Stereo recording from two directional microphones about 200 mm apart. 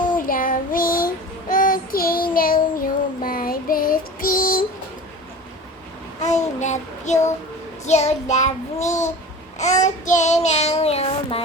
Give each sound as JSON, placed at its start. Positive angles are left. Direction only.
{"t": 0.2, "sound": "child singing", "side_deg": 45}
{"t": 6.1, "sound": "child singing", "side_deg": 35}